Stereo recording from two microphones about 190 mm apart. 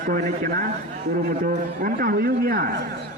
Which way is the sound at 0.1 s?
50° right (ahead or behind).